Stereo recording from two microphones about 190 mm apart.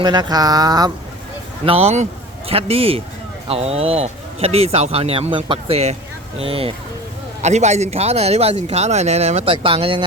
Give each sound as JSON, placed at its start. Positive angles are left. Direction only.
{"t": 0.0, "sound": "speech", "side_deg": -20}
{"t": 1.6, "sound": "speech", "side_deg": -30}